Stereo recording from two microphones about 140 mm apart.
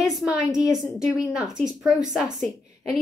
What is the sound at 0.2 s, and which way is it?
A woman's voice, 5° right (ahead or behind).